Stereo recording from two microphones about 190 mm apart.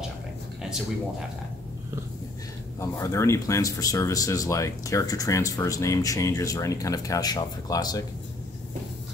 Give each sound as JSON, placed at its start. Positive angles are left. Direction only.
{"t": 2.8, "sound": "speech", "side_deg": 15}